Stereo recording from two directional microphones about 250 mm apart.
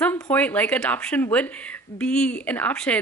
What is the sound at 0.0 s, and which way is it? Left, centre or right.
A woman's voice, centre.